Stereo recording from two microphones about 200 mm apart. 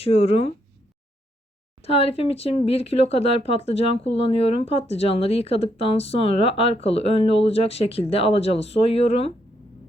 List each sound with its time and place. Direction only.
0.0 s speech: 30° left (ahead or behind)
1.8 s speech: 30° left (ahead or behind)